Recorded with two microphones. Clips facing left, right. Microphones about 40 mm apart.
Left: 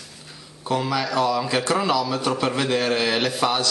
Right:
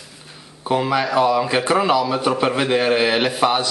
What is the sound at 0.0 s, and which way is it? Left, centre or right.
Speech, centre.